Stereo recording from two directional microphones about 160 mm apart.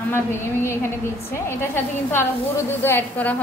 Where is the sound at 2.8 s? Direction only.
10° left (ahead or behind).